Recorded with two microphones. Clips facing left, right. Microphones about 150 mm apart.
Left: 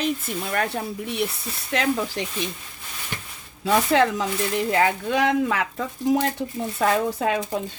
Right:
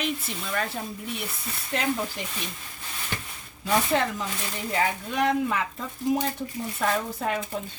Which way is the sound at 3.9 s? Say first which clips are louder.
Left 6 dB; 85° left.